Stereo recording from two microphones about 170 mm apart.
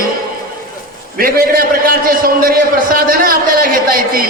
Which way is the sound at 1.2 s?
55° right (ahead or behind).